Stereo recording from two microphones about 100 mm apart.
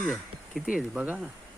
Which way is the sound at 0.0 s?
5° right (ahead or behind).